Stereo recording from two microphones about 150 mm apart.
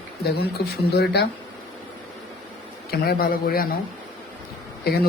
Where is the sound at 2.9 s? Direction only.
90° left.